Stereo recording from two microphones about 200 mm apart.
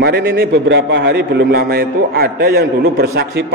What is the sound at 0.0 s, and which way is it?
A man's voice, 55° right (ahead or behind).